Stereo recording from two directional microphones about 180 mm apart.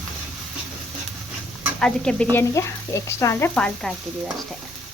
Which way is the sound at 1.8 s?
5° left (ahead or behind).